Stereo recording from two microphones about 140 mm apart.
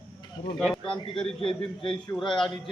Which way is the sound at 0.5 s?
Centre (ahead or behind).